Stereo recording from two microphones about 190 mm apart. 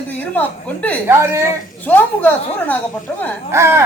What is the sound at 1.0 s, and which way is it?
Speech, 15° right (ahead or behind).